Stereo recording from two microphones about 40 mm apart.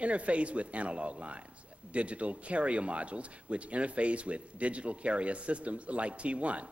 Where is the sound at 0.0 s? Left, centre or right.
Right.